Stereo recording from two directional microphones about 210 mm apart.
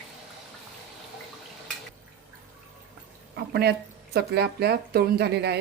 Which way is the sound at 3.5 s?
50° right (ahead or behind).